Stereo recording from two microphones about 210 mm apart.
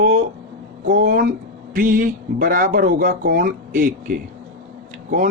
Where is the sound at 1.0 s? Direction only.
40° right (ahead or behind).